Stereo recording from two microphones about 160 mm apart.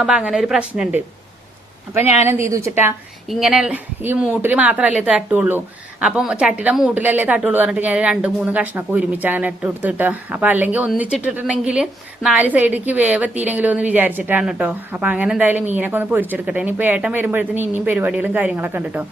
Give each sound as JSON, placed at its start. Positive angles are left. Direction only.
{"t": 0.0, "sound": "speech", "side_deg": -5}
{"t": 2.2, "sound": "a woman's voice", "side_deg": -15}
{"t": 3.2, "sound": "a woman's voice", "side_deg": 0}